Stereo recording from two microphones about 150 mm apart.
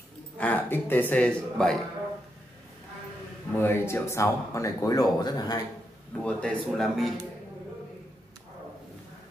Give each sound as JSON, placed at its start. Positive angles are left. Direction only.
{"t": 0.4, "sound": "a man's voice", "side_deg": 10}
{"t": 3.5, "sound": "speech", "side_deg": 15}
{"t": 6.1, "sound": "speech", "side_deg": 5}